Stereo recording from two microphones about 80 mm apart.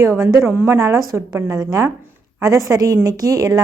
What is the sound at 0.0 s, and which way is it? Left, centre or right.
A woman's voice, right.